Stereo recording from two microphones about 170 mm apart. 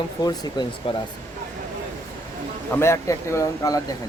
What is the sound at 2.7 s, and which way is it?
Speech, 15° left (ahead or behind).